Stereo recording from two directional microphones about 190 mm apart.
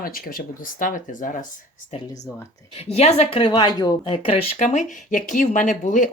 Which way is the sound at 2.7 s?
30° left (ahead or behind).